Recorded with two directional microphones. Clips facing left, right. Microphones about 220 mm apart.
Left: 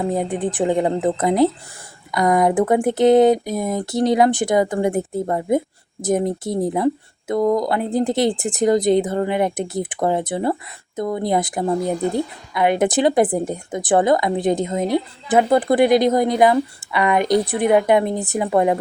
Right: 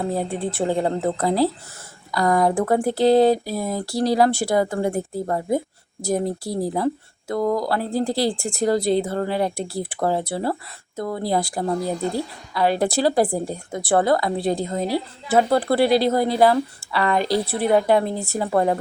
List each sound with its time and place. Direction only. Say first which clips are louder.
0.0 s speech: left 3 dB; 15° left (ahead or behind)